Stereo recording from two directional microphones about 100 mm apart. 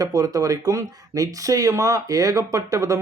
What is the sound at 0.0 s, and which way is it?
Speech, 35° right (ahead or behind).